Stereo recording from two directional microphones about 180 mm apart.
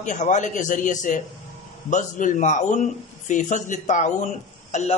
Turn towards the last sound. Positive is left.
turn(degrees=40)  # may be behind; listen again after turning